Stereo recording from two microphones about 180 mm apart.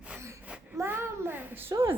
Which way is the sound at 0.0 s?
10° right (ahead or behind).